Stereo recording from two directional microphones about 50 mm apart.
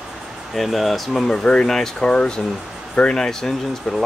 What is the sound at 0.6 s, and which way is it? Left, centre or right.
Speech, centre.